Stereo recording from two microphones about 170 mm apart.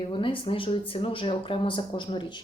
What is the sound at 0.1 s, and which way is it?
Speech, 30° left (ahead or behind).